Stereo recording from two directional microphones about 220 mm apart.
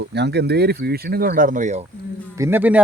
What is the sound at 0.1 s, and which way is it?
Speech, 50° right (ahead or behind).